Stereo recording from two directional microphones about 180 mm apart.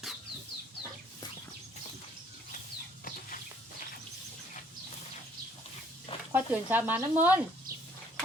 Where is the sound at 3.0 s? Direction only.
50° left (ahead or behind).